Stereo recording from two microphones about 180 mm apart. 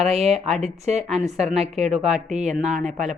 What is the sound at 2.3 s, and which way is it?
Speech, 40° right (ahead or behind).